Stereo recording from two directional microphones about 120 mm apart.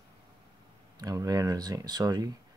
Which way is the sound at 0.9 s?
30° right (ahead or behind).